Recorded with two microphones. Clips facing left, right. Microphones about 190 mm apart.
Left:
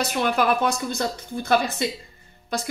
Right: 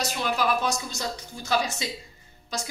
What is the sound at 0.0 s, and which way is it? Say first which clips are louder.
Speech: left 5 dB; 60° left (ahead or behind).